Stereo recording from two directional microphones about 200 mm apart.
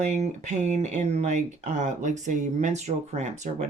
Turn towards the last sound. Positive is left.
turn(degrees=-35)  # may be behind; listen again after turning